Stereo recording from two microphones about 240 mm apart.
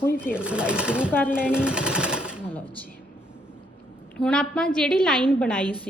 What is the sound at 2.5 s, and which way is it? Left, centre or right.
Speech, centre.